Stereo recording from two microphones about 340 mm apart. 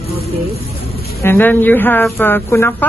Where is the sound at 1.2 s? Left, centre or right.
Centre.